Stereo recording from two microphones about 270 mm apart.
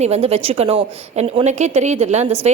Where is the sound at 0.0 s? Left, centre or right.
Right.